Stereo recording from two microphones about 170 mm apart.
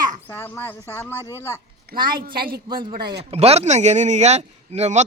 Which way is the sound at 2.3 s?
60° right (ahead or behind).